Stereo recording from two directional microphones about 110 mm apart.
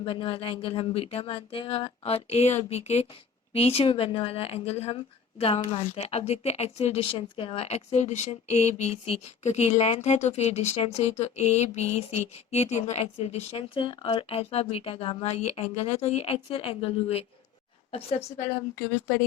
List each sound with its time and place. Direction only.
0.0 s speech: 55° left (ahead or behind); by 3.1 s 80° left
3.5 s a woman's voice: 65° left (ahead or behind)
13.7 s speech: 50° left (ahead or behind)
15.3 s a woman's voice: 75° left (ahead or behind)